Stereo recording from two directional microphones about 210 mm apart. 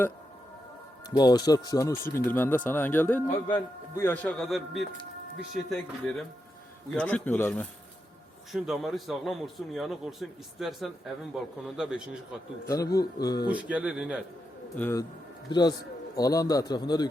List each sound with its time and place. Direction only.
1.1 s speech: 20° left (ahead or behind)
3.2 s a man's voice: 35° left (ahead or behind)
3.5 s a man's voice: 15° left (ahead or behind); by 12.4 s 5° right (ahead or behind)
12.6 s speech: 15° left (ahead or behind)
13.5 s speech: 5° right (ahead or behind)
14.8 s a man's voice: 10° left (ahead or behind)